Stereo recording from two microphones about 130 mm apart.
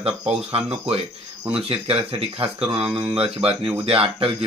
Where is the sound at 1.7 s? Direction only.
45° right (ahead or behind).